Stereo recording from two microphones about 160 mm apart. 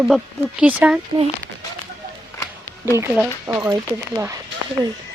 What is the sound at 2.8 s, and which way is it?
Speech, 15° right (ahead or behind).